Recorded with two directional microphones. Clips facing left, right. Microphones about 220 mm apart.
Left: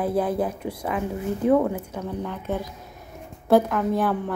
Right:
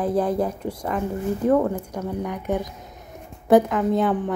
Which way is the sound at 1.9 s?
15° right (ahead or behind).